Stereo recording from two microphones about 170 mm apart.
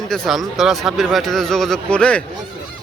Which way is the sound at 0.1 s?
Centre (ahead or behind).